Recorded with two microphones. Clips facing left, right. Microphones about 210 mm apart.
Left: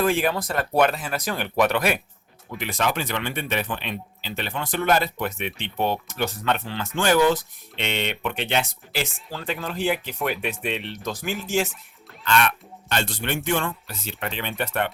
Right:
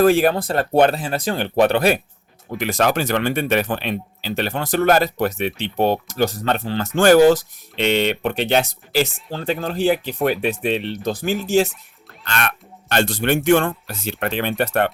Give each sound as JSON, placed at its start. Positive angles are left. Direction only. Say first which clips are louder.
{"t": 0.0, "sound": "speech", "louder": "right 7 dB", "side_deg": -40}
{"t": 2.5, "sound": "speech", "louder": "right 6 dB", "side_deg": -45}
{"t": 12.9, "sound": "a man's voice", "louder": "right 8 dB", "side_deg": -75}
{"t": 13.7, "sound": "speech", "louder": "right 6 dB", "side_deg": -50}